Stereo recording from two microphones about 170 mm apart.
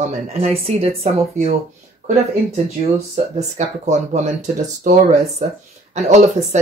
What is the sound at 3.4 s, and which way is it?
Speech, 45° right (ahead or behind).